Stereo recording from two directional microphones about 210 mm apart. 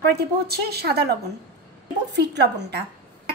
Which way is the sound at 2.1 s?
55° right (ahead or behind).